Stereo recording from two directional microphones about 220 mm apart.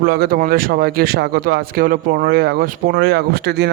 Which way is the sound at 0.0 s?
45° right (ahead or behind).